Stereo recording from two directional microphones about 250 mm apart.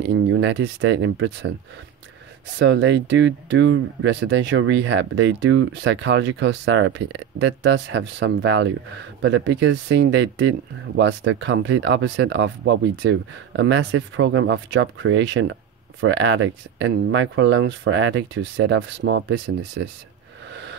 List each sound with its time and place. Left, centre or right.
0.0 s speech: right
2.6 s speech: right